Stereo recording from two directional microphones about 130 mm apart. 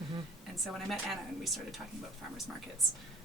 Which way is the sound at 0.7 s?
Centre (ahead or behind).